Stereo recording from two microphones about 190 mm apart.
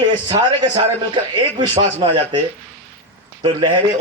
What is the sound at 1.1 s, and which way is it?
A man's voice, 25° right (ahead or behind).